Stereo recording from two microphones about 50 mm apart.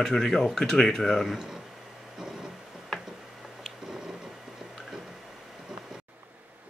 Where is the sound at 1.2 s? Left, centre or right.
Centre.